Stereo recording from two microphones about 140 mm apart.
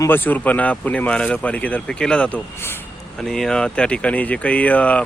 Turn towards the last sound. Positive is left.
turn(degrees=10)  # may be behind; listen again after turning